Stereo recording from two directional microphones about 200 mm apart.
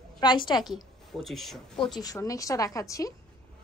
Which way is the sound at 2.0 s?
15° left (ahead or behind).